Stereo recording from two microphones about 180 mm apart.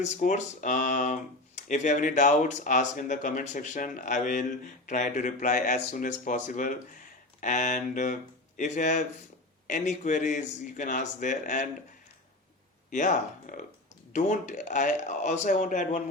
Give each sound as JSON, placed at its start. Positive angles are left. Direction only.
{"t": 0.0, "sound": "speech", "side_deg": 40}
{"t": 12.9, "sound": "speech", "side_deg": 45}